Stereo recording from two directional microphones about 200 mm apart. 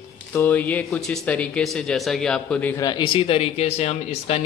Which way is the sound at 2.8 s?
25° left (ahead or behind).